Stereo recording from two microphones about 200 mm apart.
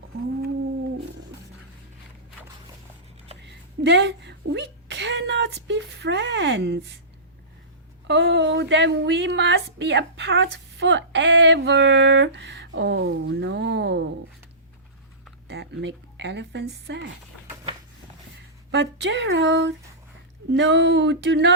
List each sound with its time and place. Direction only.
3.4 s a sound: 60° right (ahead or behind)
8.0 s speech: 60° right (ahead or behind)
15.4 s a woman's voice: 60° right (ahead or behind)
18.7 s speech: 60° right (ahead or behind)